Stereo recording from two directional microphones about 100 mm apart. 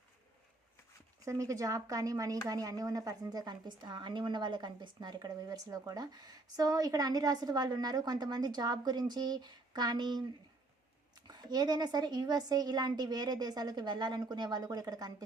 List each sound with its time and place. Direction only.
1.2 s a woman's voice: 35° right (ahead or behind)